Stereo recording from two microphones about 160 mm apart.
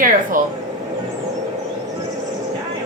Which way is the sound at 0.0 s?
60° right (ahead or behind).